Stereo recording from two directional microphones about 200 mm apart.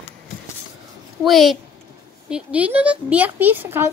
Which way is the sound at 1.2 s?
Centre (ahead or behind).